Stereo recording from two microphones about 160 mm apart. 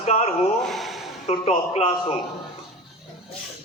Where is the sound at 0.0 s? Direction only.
40° left (ahead or behind).